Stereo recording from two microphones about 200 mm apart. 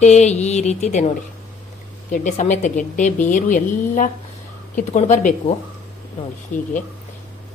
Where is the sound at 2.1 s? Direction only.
40° left (ahead or behind).